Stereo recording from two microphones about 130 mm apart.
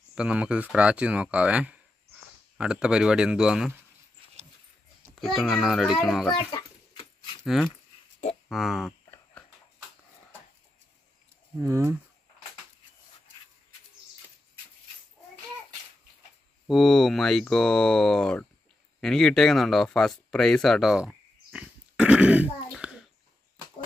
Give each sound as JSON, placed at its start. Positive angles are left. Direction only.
{"t": 0.1, "sound": "speech", "side_deg": -10}
{"t": 5.1, "sound": "speech", "side_deg": 5}
{"t": 6.3, "sound": "a sound", "side_deg": 30}
{"t": 7.4, "sound": "speech", "side_deg": 0}
{"t": 11.6, "sound": "speech", "side_deg": -20}
{"t": 16.6, "sound": "speech", "side_deg": 0}
{"t": 21.5, "sound": "dog", "side_deg": -10}
{"t": 22.8, "sound": "a sound", "side_deg": -5}